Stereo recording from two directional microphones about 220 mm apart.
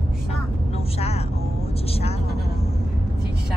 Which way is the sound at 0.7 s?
30° left (ahead or behind).